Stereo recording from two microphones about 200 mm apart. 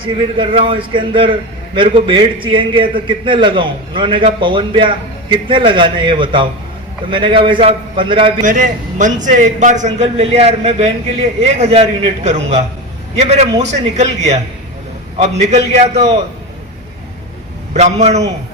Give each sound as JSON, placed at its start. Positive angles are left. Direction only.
{"t": 0.3, "sound": "a man's voice", "side_deg": -25}
{"t": 8.4, "sound": "a man's voice", "side_deg": -40}
{"t": 17.7, "sound": "a man's voice", "side_deg": -35}